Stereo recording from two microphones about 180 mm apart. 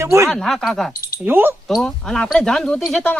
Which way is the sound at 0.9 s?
55° left (ahead or behind).